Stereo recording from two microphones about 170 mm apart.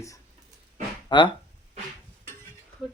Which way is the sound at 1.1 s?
25° left (ahead or behind).